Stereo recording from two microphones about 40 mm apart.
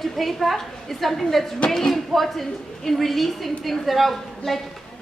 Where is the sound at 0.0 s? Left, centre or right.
Centre.